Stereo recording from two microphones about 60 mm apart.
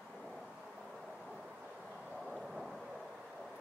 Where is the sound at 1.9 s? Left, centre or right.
Centre.